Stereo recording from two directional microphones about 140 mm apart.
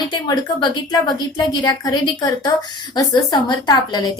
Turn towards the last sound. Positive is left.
turn(degrees=30)  # may be behind; listen again after turning